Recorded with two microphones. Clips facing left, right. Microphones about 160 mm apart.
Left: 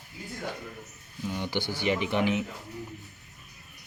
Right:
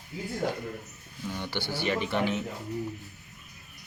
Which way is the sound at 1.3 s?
15° left (ahead or behind).